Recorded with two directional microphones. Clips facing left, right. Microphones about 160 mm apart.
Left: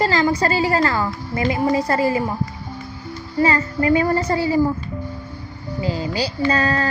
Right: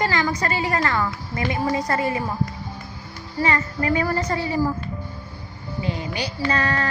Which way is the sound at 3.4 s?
30° left (ahead or behind).